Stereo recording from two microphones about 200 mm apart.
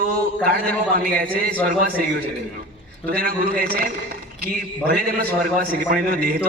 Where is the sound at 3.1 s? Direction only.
45° right (ahead or behind).